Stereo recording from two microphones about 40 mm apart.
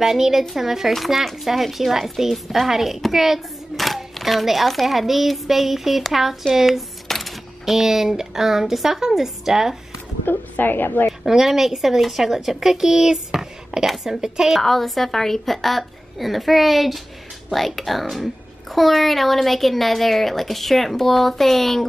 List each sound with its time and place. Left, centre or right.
0.0 s a woman's voice: centre
7.1 s music: centre
7.6 s a woman's voice: centre
10.3 s a woman's voice: left
11.2 s a woman's voice: centre
14.6 s a child's voice: centre